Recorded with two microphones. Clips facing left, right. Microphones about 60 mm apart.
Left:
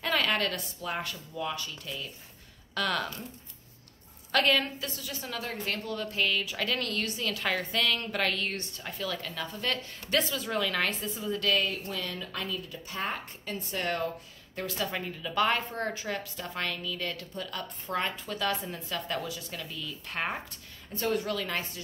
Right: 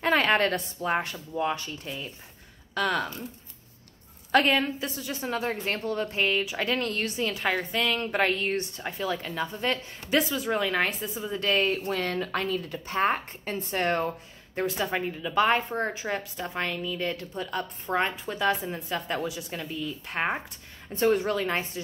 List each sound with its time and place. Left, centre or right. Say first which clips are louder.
0.0 s speech: right 6 dB; right
2.7 s speech: right 3 dB; centre
4.3 s a woman's voice: right 4 dB; centre